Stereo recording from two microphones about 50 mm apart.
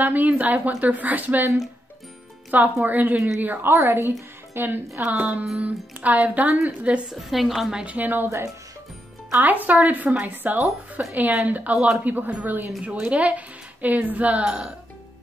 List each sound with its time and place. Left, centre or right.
0.0 s a woman's voice: right
2.5 s speech: right
3.7 s a woman's voice: right
5.0 s music: right
5.6 s speech: right
7.1 s a woman's voice: centre
7.7 s speech: right
9.4 s a woman's voice: right
14.4 s speech: centre